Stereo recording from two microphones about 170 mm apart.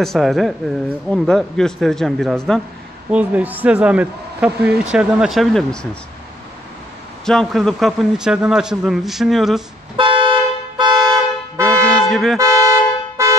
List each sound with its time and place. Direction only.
0.0 s speech: centre (ahead or behind)
3.1 s a man's voice: 10° right (ahead or behind)
7.2 s speech: 5° left (ahead or behind)
9.9 s vehicle horn: 30° right (ahead or behind)
12.1 s speech: centre (ahead or behind)
12.4 s toot: 20° right (ahead or behind)
13.2 s a sound: 15° right (ahead or behind)